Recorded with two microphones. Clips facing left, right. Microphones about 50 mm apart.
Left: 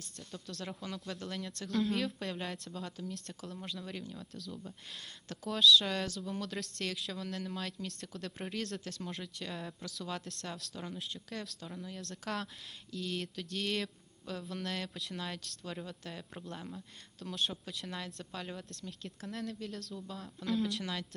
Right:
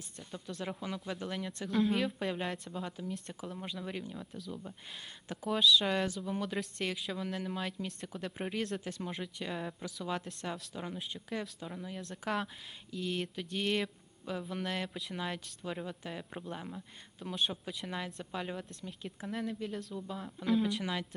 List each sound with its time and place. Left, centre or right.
0.2 s speech: centre